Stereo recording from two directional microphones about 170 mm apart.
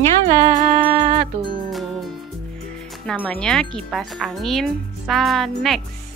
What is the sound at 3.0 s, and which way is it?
Speech, 5° left (ahead or behind).